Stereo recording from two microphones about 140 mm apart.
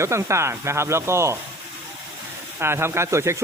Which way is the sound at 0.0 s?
20° right (ahead or behind).